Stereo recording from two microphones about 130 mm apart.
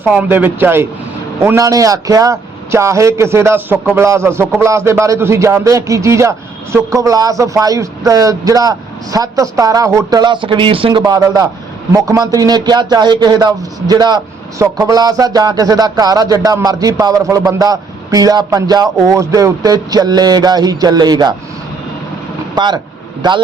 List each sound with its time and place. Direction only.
0.0 s a man's voice: 10° right (ahead or behind); by 21.3 s 35° right (ahead or behind)
22.5 s a man's voice: 35° right (ahead or behind)